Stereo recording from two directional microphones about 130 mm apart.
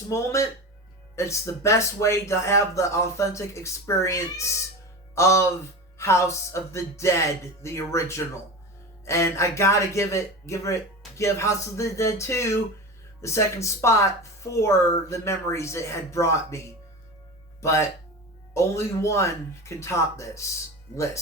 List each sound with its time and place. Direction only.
0.1 s speech: 25° left (ahead or behind)